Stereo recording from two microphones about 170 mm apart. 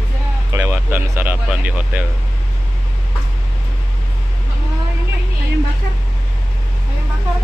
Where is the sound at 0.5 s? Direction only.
15° right (ahead or behind).